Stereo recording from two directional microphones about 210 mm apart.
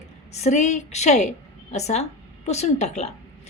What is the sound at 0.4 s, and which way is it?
A woman's voice, 35° left (ahead or behind).